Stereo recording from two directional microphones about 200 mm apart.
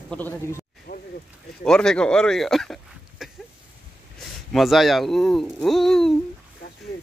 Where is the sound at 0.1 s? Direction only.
10° left (ahead or behind).